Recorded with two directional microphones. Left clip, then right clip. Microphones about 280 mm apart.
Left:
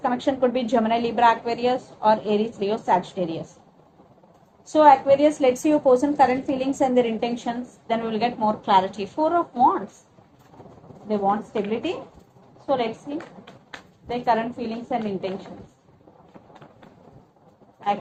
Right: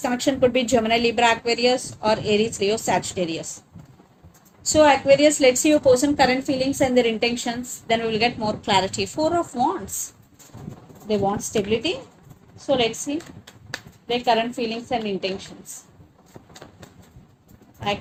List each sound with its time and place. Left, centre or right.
0.3 s a woman's voice: right
4.7 s a woman's voice: right
11.1 s a woman's voice: right
14.3 s a woman's voice: right